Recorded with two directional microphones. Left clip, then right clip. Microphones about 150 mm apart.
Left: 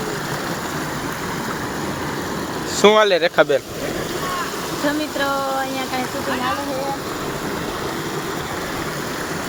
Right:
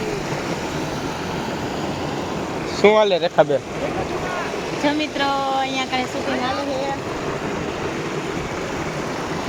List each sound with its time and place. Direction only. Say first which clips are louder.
2.8 s speech: left 2 dB; 35° left (ahead or behind)